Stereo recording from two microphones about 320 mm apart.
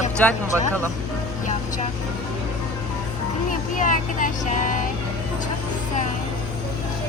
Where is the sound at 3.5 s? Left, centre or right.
Left.